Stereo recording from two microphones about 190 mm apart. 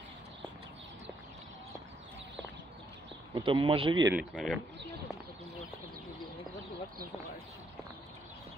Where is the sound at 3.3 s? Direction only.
25° right (ahead or behind).